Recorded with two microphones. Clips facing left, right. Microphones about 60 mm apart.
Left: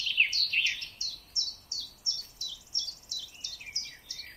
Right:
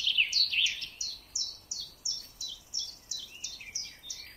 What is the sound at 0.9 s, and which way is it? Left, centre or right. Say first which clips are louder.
Bird: left 3 dB; centre.